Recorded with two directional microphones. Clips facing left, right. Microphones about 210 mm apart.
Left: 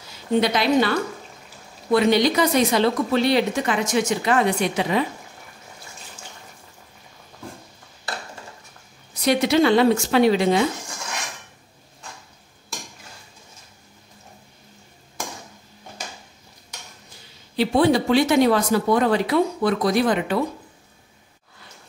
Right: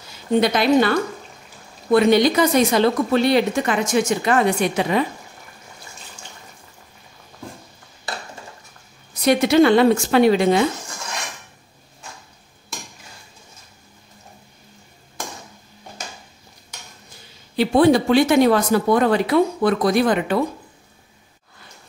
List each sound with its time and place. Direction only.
0.4 s speech: 50° right (ahead or behind)
9.2 s speech: 50° right (ahead or behind)
17.6 s speech: 50° right (ahead or behind)